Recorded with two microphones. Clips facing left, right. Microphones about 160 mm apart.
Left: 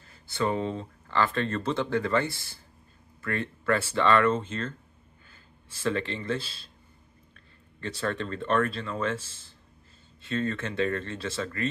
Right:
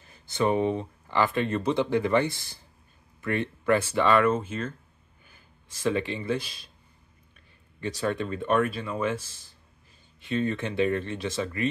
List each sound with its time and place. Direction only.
0.0 s speech: 15° right (ahead or behind)
7.8 s speech: 15° right (ahead or behind)